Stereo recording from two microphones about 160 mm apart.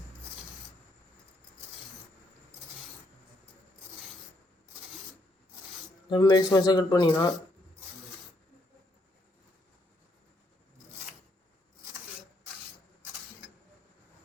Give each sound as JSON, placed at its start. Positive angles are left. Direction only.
{"t": 6.1, "sound": "speech", "side_deg": 25}